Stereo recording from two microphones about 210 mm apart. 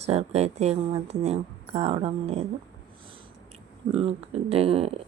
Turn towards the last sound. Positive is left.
turn(degrees=-30)  # may be behind; listen again after turning